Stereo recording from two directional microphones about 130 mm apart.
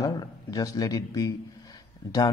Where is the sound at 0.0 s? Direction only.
25° left (ahead or behind).